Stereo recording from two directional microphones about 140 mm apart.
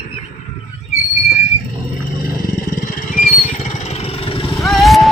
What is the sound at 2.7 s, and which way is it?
Vehicle, 80° left.